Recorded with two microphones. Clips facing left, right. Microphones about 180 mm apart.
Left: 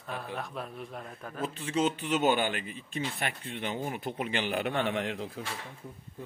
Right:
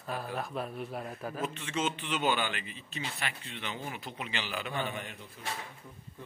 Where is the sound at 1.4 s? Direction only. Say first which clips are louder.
Left 5 dB; 35° left (ahead or behind); by 5.4 s 90° left.